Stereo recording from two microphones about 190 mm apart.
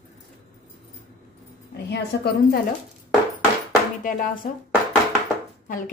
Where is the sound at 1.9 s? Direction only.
55° left (ahead or behind).